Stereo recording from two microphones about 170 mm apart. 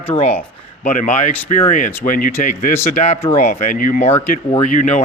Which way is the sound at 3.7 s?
50° left (ahead or behind).